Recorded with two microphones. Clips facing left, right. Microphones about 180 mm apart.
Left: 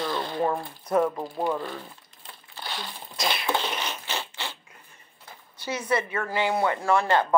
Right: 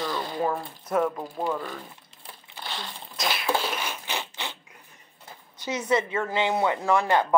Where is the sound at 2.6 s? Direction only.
Centre (ahead or behind).